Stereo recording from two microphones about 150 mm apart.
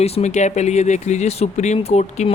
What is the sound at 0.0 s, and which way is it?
Speech, 45° left (ahead or behind).